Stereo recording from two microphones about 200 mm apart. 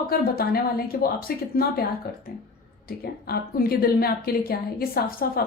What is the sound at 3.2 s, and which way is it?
A woman's voice, 50° left (ahead or behind).